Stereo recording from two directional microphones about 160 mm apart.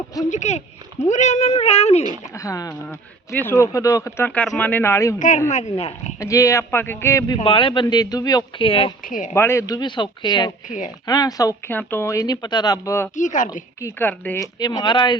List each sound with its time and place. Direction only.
0.3 s speech: 45° left (ahead or behind)
2.3 s speech: 20° left (ahead or behind)
5.5 s speech: 45° left (ahead or behind)
6.1 s speech: 20° left (ahead or behind)
7.4 s speech: 35° left (ahead or behind)
9.0 s speech: 55° left (ahead or behind)
9.3 s speech: 15° left (ahead or behind)
13.1 s speech: 55° left (ahead or behind)
13.8 s speech: 10° left (ahead or behind)
14.4 s speech: 25° left (ahead or behind)